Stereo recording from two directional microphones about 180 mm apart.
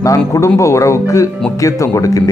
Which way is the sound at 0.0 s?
15° left (ahead or behind).